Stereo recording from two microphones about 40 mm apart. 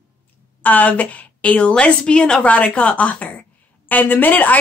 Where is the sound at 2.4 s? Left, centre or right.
Left.